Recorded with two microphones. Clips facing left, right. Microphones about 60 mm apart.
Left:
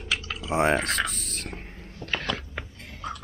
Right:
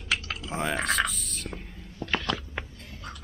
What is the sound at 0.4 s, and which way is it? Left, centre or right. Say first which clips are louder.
Speech: left 6 dB; left.